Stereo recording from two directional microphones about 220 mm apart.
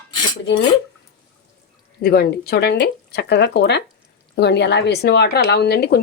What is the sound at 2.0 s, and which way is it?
Speech, 45° left (ahead or behind).